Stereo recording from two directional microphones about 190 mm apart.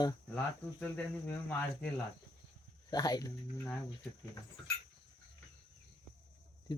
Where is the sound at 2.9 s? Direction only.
20° left (ahead or behind).